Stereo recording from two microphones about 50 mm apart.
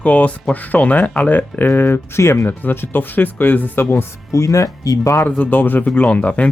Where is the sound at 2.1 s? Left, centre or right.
Left.